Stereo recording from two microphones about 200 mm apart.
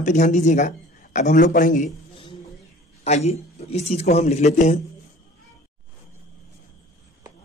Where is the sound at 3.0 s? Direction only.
35° left (ahead or behind).